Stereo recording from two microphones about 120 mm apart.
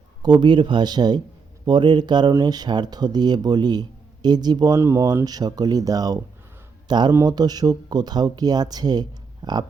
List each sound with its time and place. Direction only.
0.2 s speech: 40° right (ahead or behind)
4.8 s speech: 25° right (ahead or behind)